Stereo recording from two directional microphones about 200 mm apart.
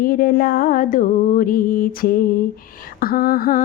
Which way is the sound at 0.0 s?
45° left (ahead or behind).